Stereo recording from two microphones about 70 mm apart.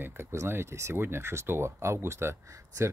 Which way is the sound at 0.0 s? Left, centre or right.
Right.